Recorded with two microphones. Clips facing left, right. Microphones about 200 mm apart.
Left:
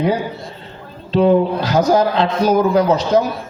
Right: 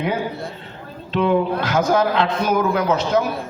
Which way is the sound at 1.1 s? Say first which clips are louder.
Left 5 dB; 35° left (ahead or behind).